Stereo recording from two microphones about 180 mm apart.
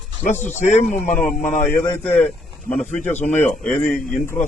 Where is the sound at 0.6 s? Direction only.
40° left (ahead or behind).